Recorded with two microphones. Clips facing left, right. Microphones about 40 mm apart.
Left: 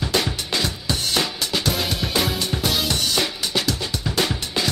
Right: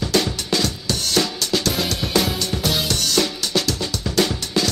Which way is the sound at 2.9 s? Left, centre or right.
Centre.